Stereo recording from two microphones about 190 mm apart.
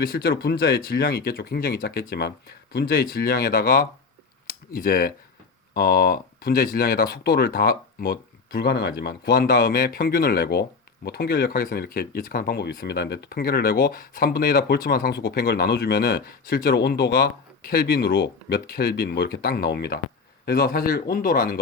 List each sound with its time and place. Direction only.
0.0 s speech: 55° left (ahead or behind)